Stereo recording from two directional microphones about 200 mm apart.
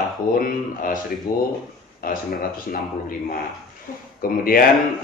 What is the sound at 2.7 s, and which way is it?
Speech, 45° left (ahead or behind).